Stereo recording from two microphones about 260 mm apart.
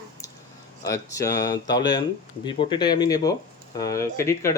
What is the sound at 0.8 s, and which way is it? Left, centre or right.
Speech, centre.